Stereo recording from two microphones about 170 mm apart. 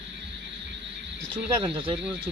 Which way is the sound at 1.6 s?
30° right (ahead or behind).